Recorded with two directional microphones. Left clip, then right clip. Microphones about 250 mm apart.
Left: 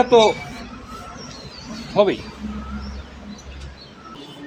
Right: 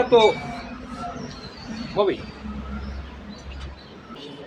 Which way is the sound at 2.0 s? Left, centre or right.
Left.